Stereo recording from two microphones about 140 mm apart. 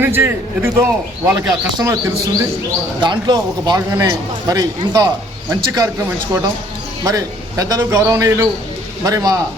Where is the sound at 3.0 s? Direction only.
30° right (ahead or behind).